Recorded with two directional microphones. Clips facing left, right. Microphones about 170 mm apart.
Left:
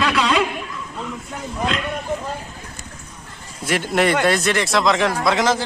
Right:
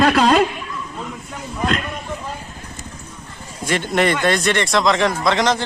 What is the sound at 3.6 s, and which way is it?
Speech, 5° left (ahead or behind).